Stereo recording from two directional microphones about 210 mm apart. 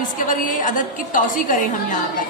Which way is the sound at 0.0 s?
40° left (ahead or behind).